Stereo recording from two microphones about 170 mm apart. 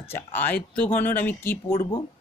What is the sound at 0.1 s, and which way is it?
Speech, 10° left (ahead or behind).